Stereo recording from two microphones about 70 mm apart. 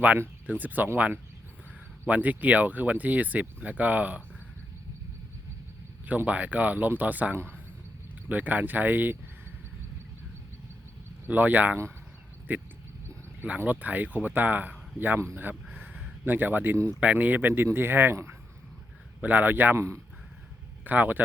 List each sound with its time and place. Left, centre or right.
0.4 s speech: right
6.1 s speech: right
7.3 s speech: right
8.3 s speech: right
11.3 s speech: right
15.4 s a sound: right
17.0 s speech: right
19.2 s speech: right
20.8 s speech: right